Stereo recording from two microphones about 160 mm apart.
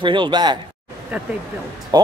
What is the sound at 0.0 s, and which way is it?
Speech, 30° right (ahead or behind).